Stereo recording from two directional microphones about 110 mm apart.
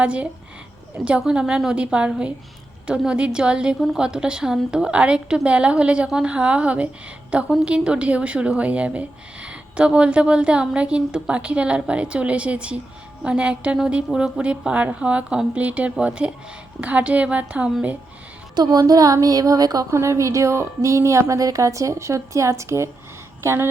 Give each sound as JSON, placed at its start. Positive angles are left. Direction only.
{"t": 0.0, "sound": "a woman's voice", "side_deg": -10}
{"t": 18.5, "sound": "a woman's voice", "side_deg": -35}